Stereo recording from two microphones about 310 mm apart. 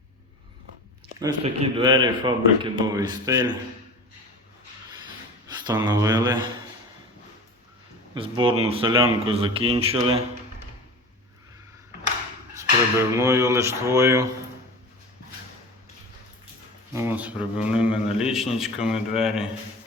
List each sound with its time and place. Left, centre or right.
1.2 s speech: centre
5.6 s speech: centre
8.1 s a man's voice: centre
13.1 s speech: centre
16.9 s a man's voice: centre